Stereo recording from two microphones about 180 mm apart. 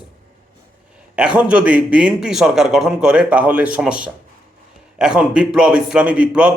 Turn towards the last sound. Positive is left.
turn(degrees=-5)  # may be behind; listen again after turning